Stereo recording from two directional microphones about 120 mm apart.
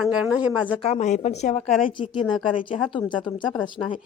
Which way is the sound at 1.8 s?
45° left (ahead or behind).